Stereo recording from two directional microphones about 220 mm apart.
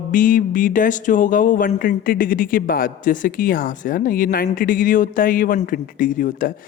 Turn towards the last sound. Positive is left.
turn(degrees=40)  # may be behind; listen again after turning